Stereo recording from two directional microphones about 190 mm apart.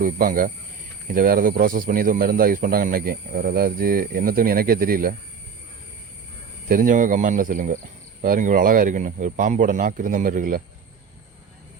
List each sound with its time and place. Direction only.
0.0 s speech: 45° right (ahead or behind)
6.7 s speech: 45° right (ahead or behind)